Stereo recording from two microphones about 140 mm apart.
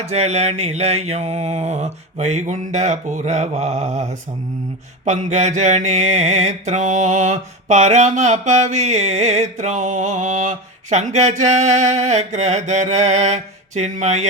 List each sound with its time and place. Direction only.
0.0 s mantra: 50° right (ahead or behind)